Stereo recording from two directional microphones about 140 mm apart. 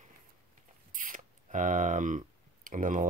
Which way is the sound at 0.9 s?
70° right (ahead or behind).